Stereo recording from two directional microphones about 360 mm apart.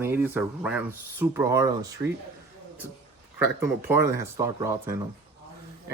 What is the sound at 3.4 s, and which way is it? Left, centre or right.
Speech, centre.